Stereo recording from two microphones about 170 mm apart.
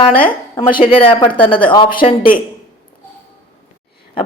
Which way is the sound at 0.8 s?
35° left (ahead or behind).